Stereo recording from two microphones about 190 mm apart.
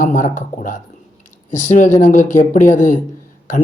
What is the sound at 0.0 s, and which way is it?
A man's voice, 40° left (ahead or behind).